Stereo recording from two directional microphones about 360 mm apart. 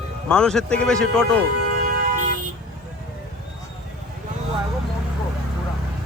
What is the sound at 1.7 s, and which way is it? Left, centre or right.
Music, right.